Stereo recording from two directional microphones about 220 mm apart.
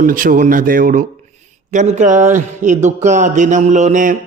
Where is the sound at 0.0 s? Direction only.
40° right (ahead or behind).